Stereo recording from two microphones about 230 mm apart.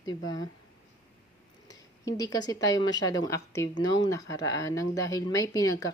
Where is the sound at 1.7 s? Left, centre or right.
Centre.